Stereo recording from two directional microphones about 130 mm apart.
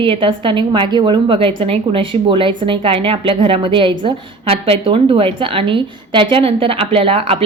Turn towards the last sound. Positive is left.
turn(degrees=-45)  # may be behind; listen again after turning